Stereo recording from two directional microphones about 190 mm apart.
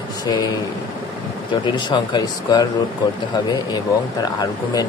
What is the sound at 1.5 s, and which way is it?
Speech, 25° left (ahead or behind).